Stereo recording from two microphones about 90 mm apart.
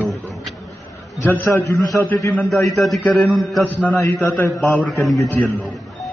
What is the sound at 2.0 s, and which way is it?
Speech, 20° left (ahead or behind).